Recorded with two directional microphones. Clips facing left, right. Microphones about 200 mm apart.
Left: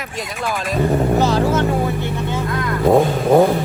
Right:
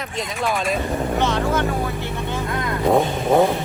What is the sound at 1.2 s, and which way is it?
Vehicle, 35° left (ahead or behind).